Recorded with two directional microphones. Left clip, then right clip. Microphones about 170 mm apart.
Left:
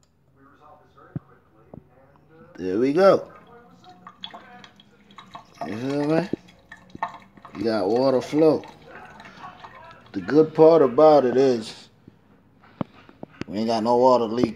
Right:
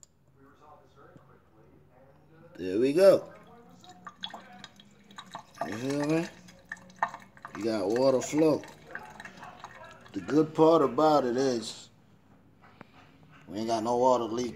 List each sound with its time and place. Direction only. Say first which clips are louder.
2.5 s speech: left 5 dB; 30° left (ahead or behind)
5.1 s drip: left 2 dB; 25° right (ahead or behind)
5.8 s speech: left 7 dB; 20° left (ahead or behind)
6.2 s stir: left 8 dB; 20° right (ahead or behind)
7.6 s speech: left 5 dB; 30° left (ahead or behind)
10.1 s a man's voice: left 8 dB; 30° left (ahead or behind)
13.5 s a man's voice: left 7 dB; 35° left (ahead or behind)